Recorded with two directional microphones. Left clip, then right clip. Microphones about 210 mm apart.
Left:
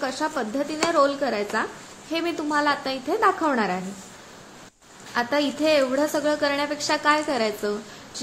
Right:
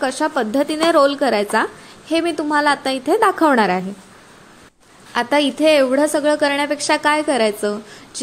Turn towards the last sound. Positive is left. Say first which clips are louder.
# right 7 dB
turn(degrees=-35)  # may be behind; listen again after turning